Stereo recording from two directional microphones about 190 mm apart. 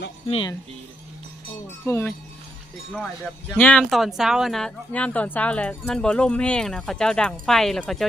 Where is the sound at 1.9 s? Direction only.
10° left (ahead or behind).